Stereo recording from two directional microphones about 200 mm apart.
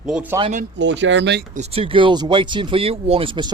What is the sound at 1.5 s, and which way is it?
Speech, 30° right (ahead or behind).